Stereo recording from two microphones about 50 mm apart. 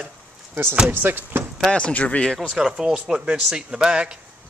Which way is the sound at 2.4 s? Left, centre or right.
Centre.